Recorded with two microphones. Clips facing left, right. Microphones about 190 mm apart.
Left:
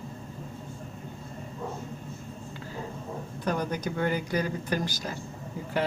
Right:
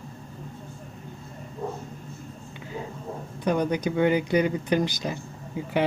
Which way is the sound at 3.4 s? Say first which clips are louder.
Right 6 dB; 15° right (ahead or behind).